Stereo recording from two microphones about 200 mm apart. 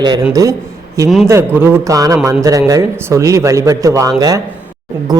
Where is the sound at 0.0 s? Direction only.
20° right (ahead or behind).